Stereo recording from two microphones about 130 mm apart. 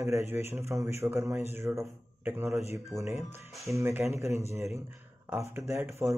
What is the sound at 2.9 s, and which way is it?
Speech, 30° right (ahead or behind).